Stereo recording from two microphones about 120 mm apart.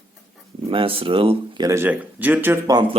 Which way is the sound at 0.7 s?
50° right (ahead or behind).